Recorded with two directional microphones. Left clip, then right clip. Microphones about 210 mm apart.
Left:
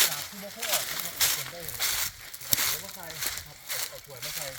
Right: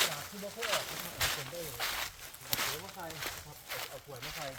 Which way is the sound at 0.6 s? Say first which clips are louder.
Left 4 dB; 55° left (ahead or behind).